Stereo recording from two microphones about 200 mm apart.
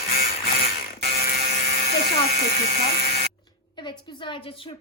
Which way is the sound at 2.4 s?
50° left (ahead or behind).